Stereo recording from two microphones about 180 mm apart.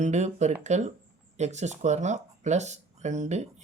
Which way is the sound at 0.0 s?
40° right (ahead or behind).